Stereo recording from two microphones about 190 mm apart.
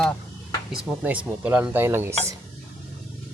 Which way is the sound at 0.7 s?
5° right (ahead or behind).